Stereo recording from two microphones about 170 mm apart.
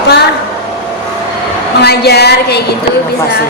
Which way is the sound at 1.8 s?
70° left (ahead or behind).